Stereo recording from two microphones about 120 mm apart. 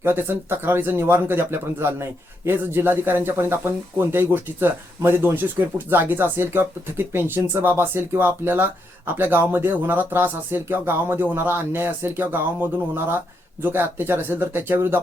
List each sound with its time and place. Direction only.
0.0 s speech: 20° right (ahead or behind)